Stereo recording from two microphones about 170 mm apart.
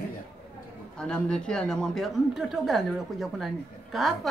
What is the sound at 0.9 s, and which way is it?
Speech, 5° left (ahead or behind).